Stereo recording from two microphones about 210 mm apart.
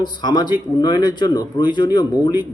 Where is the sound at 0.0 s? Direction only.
20° left (ahead or behind).